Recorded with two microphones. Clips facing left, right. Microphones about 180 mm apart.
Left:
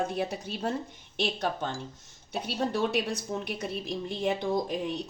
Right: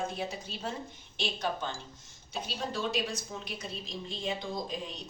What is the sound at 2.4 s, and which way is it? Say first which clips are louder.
A woman's voice: left 6 dB; 60° left (ahead or behind).